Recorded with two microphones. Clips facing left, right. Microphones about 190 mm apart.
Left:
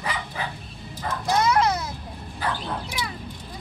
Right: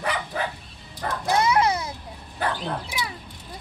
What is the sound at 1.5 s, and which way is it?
Vehicle, 10° right (ahead or behind).